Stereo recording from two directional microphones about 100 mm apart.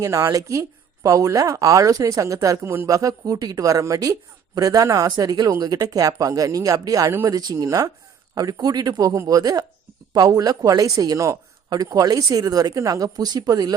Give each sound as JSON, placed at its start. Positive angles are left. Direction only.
{"t": 0.0, "sound": "speech", "side_deg": -35}